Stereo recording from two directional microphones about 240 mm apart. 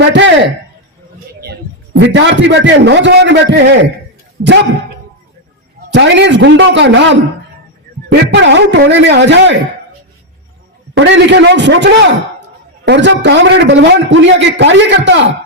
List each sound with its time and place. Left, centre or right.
0.1 s a man's voice: right
2.0 s a man's voice: right
5.9 s a man's voice: right
8.3 s a man's voice: right
10.9 s a man's voice: right